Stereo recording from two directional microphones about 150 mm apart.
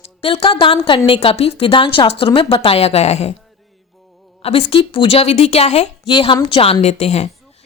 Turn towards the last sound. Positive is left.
turn(degrees=45)  # may be behind; listen again after turning